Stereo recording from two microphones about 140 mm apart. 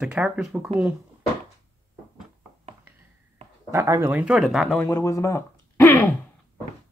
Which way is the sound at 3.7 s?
20° right (ahead or behind).